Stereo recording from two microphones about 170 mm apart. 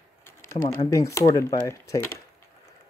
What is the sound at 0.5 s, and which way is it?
Speech, 20° left (ahead or behind).